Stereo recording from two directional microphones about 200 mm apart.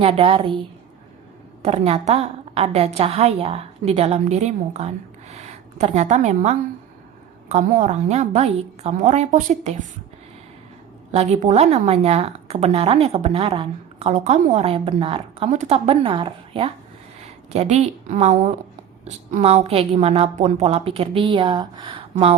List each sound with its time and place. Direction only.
0.0 s a woman's voice: 30° right (ahead or behind)
1.6 s a woman's voice: 30° right (ahead or behind)
11.1 s a woman's voice: 30° right (ahead or behind)